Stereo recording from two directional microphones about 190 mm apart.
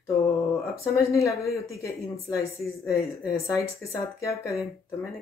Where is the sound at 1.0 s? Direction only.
15° left (ahead or behind).